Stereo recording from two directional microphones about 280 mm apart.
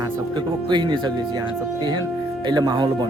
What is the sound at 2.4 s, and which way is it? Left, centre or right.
Speech, centre.